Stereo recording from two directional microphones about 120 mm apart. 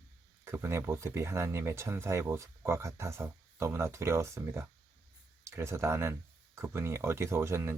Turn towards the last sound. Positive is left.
turn(degrees=-20)  # may be behind; listen again after turning